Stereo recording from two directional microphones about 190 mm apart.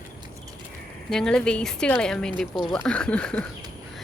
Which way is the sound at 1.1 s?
5° left (ahead or behind).